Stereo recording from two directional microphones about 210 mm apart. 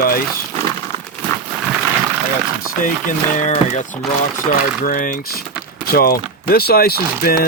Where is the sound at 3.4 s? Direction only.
35° left (ahead or behind).